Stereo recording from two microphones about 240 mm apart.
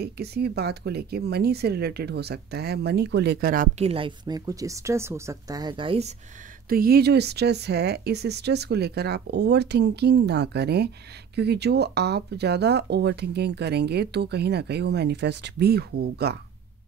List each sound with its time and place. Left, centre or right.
0.0 s speech: right
6.7 s speech: right